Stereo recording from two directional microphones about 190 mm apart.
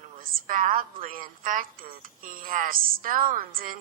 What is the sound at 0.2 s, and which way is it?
A woman's voice, 45° right (ahead or behind).